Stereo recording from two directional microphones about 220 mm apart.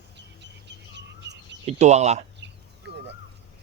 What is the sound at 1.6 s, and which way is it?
Speech, 30° right (ahead or behind).